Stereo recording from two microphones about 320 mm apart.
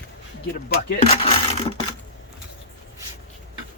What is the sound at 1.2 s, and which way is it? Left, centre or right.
Speech, centre.